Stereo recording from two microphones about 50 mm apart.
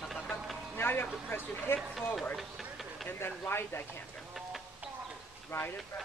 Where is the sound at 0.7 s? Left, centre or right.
Left.